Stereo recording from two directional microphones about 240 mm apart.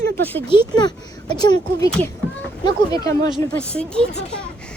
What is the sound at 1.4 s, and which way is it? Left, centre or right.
Speech, centre.